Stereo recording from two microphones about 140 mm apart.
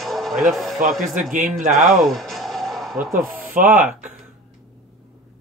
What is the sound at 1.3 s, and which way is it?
Speech, 70° right (ahead or behind).